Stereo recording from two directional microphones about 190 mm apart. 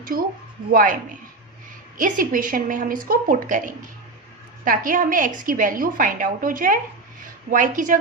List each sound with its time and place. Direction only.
0.0 s a woman's voice: 50° right (ahead or behind)
2.0 s a woman's voice: 45° right (ahead or behind)
4.6 s a woman's voice: 45° right (ahead or behind)